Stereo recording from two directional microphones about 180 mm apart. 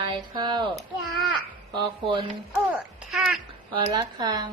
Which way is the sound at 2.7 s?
5° right (ahead or behind).